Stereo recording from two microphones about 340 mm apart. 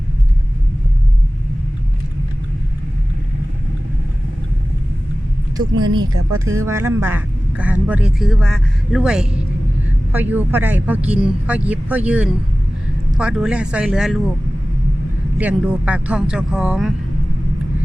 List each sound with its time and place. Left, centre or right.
6.1 s speech: right
6.7 s speech: centre
15.4 s speech: centre